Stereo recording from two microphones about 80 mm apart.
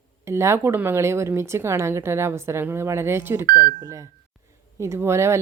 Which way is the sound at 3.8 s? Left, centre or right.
Right.